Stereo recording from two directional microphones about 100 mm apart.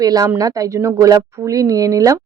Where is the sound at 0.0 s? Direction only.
40° right (ahead or behind).